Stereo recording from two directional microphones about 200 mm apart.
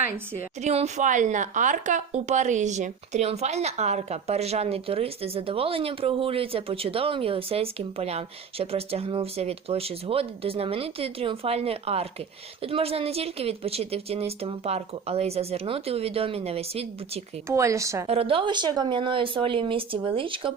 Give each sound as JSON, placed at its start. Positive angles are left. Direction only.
{"t": 0.6, "sound": "a woman's voice", "side_deg": -35}
{"t": 17.5, "sound": "speech", "side_deg": -15}
{"t": 18.1, "sound": "a woman's voice", "side_deg": -30}